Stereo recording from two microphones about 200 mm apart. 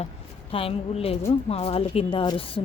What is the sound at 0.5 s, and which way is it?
Speech, 30° left (ahead or behind).